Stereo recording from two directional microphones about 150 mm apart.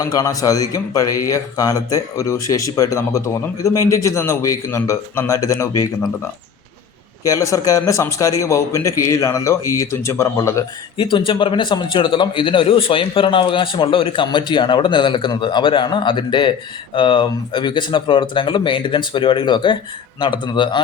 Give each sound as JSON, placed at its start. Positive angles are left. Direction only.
{"t": 0.0, "sound": "speech", "side_deg": 25}
{"t": 7.3, "sound": "speech", "side_deg": 20}
{"t": 10.9, "sound": "a man's voice", "side_deg": 35}